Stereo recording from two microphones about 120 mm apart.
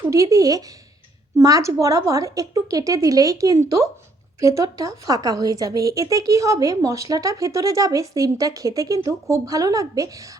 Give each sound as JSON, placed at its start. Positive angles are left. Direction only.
{"t": 0.0, "sound": "a woman's voice", "side_deg": -25}